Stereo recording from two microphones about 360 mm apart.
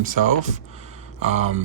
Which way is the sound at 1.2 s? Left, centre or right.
Centre.